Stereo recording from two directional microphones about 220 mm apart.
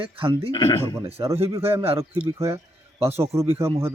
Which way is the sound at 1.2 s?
20° right (ahead or behind).